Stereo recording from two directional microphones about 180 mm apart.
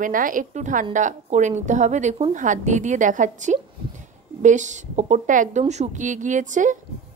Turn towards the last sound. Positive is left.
turn(degrees=-45)  # may be behind; listen again after turning